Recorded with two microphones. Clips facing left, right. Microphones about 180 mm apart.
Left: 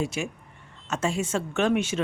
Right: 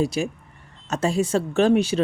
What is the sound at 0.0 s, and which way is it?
Speech, 35° right (ahead or behind).